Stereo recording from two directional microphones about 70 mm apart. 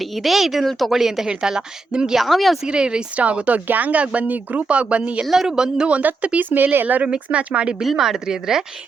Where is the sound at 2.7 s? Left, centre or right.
Centre.